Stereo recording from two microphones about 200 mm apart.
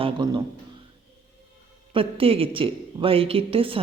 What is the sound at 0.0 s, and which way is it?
Speech, 20° right (ahead or behind).